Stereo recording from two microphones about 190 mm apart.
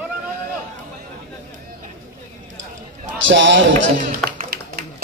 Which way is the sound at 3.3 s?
75° right (ahead or behind).